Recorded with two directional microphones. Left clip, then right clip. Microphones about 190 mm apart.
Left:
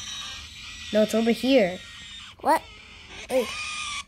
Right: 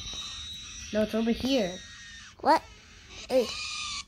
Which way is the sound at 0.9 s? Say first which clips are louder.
Left 6 dB; 60° left (ahead or behind).